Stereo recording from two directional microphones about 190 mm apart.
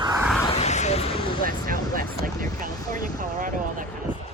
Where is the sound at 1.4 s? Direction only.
45° right (ahead or behind).